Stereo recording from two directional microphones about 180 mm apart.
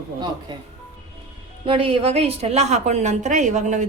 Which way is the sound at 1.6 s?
30° right (ahead or behind).